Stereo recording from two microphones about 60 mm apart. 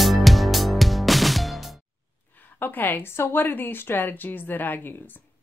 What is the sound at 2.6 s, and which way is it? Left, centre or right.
Speech, left.